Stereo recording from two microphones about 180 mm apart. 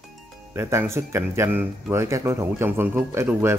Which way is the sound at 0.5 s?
15° right (ahead or behind).